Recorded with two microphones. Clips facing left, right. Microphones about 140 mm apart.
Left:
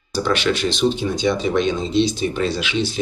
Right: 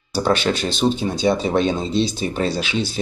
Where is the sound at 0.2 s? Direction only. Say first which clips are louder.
Even; 35° right (ahead or behind).